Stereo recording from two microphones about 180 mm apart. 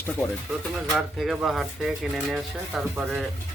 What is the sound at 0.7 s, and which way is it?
Speech, centre (ahead or behind).